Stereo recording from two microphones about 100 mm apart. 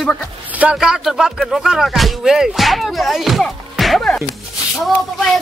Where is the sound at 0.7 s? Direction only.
5° right (ahead or behind).